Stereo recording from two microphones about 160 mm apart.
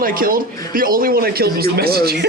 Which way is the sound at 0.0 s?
60° right (ahead or behind).